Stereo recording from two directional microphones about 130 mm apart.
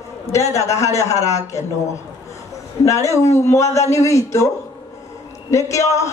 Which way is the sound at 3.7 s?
25° left (ahead or behind).